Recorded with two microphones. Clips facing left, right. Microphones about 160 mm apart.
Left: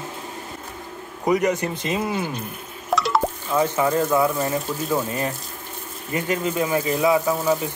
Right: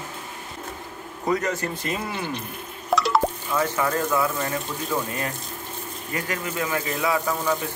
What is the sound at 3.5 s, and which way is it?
Speech, 20° left (ahead or behind).